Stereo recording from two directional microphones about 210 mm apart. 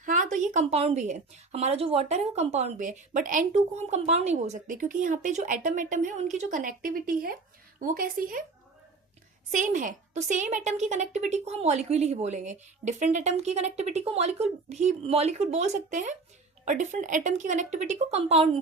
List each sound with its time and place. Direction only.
0.0 s a woman's voice: 40° right (ahead or behind)
9.5 s a woman's voice: 35° right (ahead or behind)